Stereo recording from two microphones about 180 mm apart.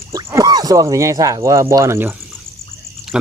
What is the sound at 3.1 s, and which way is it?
Speech, 5° right (ahead or behind).